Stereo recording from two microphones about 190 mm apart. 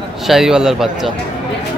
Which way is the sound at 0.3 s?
Centre (ahead or behind).